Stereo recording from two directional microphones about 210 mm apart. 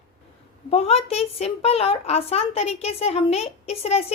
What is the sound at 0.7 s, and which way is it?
A woman's voice, 30° left (ahead or behind).